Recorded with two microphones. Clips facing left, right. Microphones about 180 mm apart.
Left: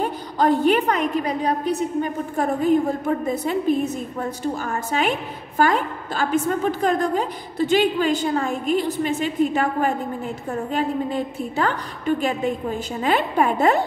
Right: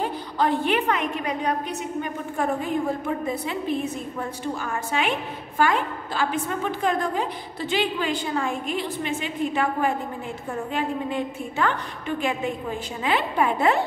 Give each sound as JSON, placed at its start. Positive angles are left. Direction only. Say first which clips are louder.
{"t": 0.0, "sound": "a woman's voice", "louder": "left 3 dB", "side_deg": 45}
{"t": 13.0, "sound": "a woman's voice", "louder": "left 3 dB", "side_deg": 45}